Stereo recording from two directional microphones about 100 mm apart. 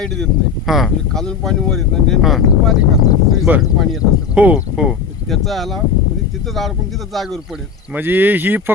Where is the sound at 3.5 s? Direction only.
20° right (ahead or behind).